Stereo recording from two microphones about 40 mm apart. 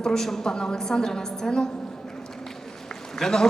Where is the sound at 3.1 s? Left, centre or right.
Centre.